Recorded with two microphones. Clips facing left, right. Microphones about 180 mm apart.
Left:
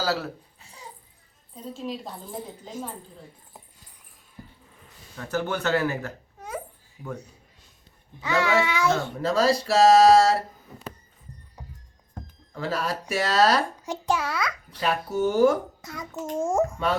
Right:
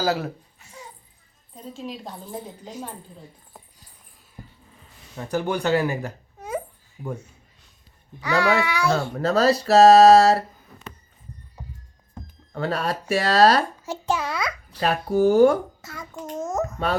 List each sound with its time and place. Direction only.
0.0 s speech: 20° right (ahead or behind)
0.6 s dog: 35° left (ahead or behind)
1.6 s a woman's voice: centre (ahead or behind)
5.1 s speech: 20° right (ahead or behind)
7.0 s speech: 50° right (ahead or behind)
8.2 s a child's voice: 20° left (ahead or behind)
9.1 s speech: 65° right (ahead or behind)
9.6 s a sound: 65° right (ahead or behind)
12.5 s speech: 65° right (ahead or behind)
13.8 s a child's voice: 15° left (ahead or behind)
14.8 s speech: 65° right (ahead or behind)
15.8 s a child's voice: centre (ahead or behind)